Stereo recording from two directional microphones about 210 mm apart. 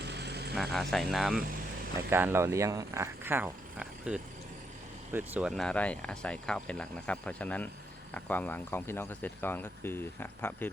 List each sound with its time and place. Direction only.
0.0 s vehicle: 55° right (ahead or behind)
0.5 s speech: centre (ahead or behind)